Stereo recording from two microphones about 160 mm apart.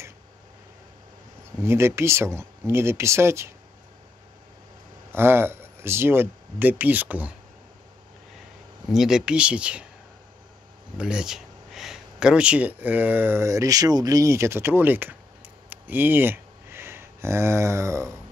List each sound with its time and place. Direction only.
1.6 s speech: 15° right (ahead or behind)
5.1 s speech: 15° right (ahead or behind)
8.8 s speech: centre (ahead or behind)
11.0 s speech: 5° right (ahead or behind)
15.7 s a sound: 10° right (ahead or behind)